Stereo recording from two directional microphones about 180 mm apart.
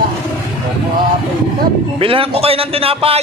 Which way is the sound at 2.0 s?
30° right (ahead or behind).